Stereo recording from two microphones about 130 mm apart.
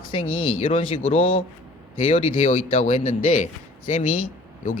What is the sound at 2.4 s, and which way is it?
Speech, 75° left (ahead or behind).